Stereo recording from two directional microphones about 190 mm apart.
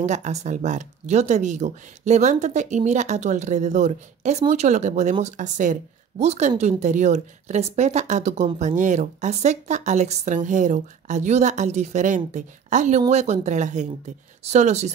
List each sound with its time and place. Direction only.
0.0 s speech: 40° right (ahead or behind)